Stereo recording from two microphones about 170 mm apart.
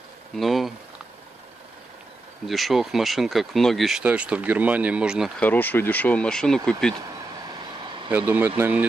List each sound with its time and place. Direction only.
0.4 s speech: centre (ahead or behind)
2.4 s speech: centre (ahead or behind)
5.4 s speech: 10° left (ahead or behind)
7.4 s vehicle: 25° right (ahead or behind)
8.1 s speech: 10° right (ahead or behind)